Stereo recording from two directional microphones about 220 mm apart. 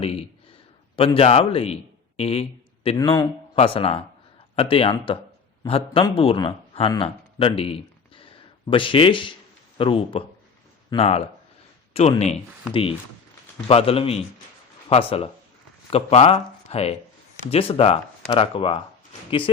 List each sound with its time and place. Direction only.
0.0 s a sound: 25° left (ahead or behind)
0.9 s a man's voice: 25° left (ahead or behind)
13.7 s speech: 25° left (ahead or behind)